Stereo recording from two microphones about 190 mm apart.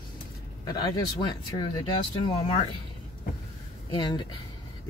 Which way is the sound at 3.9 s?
25° left (ahead or behind).